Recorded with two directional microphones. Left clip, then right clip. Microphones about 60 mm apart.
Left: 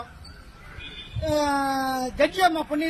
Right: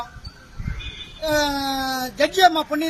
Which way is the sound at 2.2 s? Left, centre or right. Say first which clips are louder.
Right 5 dB; centre.